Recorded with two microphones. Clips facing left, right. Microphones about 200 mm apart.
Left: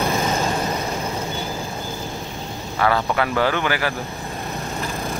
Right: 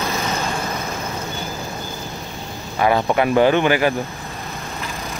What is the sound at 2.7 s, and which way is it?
Speech, 20° right (ahead or behind).